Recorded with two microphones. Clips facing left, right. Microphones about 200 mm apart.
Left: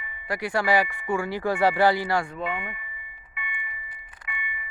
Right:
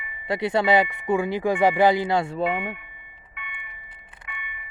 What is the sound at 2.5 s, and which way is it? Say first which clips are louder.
Glockenspiel: right 5 dB; 85° right.